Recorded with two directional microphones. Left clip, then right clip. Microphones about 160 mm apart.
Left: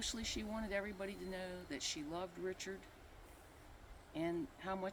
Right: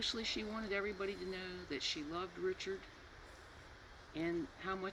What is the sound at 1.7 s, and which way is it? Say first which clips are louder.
Speech: right 5 dB; 30° left (ahead or behind).